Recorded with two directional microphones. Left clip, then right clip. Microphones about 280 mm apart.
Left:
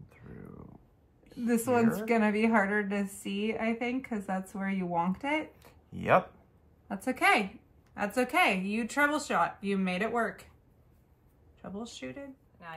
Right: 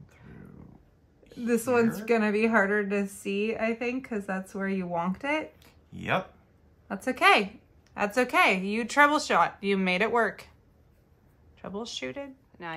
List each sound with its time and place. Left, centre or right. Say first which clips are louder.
1.4 s a woman's voice: right 3 dB; centre
5.6 s a sound: left 1 dB; centre
7.1 s speech: right 4 dB; centre
11.6 s speech: right 6 dB; centre